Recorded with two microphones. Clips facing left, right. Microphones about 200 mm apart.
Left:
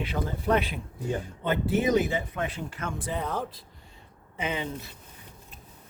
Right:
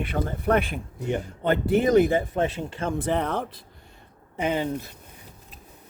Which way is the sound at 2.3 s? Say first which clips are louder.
Right 7 dB; 25° right (ahead or behind).